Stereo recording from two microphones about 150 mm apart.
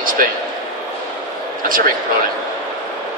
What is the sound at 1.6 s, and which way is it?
Speech, 65° right (ahead or behind).